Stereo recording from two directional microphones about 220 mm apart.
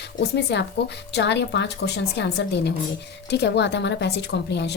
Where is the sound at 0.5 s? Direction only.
50° left (ahead or behind).